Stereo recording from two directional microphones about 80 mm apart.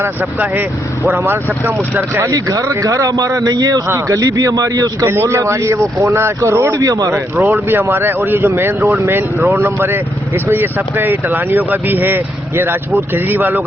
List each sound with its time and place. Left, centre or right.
0.0 s speech: right
2.3 s speech: right
3.8 s speech: right
5.0 s speech: right
7.3 s speech: right